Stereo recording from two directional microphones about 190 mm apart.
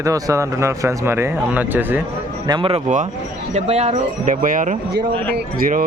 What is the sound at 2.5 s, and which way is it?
Speech, 30° right (ahead or behind).